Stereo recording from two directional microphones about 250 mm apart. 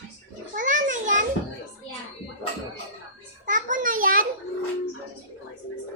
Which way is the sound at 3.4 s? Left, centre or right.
Right.